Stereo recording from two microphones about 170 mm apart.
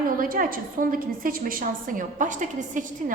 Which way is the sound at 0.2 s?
55° right (ahead or behind).